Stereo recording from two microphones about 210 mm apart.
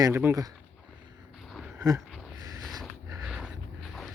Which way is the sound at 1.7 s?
15° right (ahead or behind).